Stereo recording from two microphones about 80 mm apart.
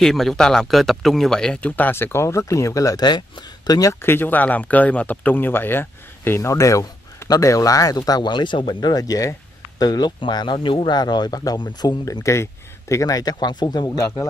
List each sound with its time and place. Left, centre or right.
0.0 s speech: centre
1.8 s speech: left
3.0 s speech: left
4.0 s speech: left
6.5 s speech: left
13.9 s speech: left